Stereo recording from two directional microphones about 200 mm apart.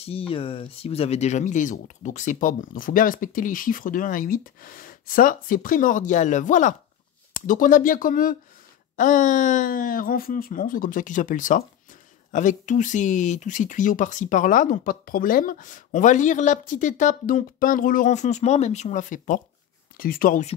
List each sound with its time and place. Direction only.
0.0 s speech: 30° left (ahead or behind); by 20.4 s 45° left (ahead or behind)